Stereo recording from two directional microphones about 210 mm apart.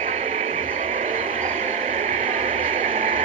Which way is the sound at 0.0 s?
30° right (ahead or behind).